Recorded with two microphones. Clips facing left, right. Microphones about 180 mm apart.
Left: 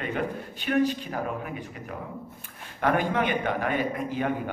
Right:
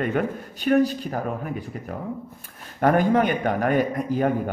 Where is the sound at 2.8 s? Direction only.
45° right (ahead or behind).